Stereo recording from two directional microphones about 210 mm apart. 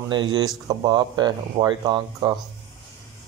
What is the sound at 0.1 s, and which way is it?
Speech, 20° right (ahead or behind).